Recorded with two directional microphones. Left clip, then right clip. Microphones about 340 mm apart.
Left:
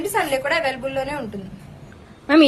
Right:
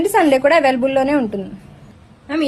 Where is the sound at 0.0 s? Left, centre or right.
Centre.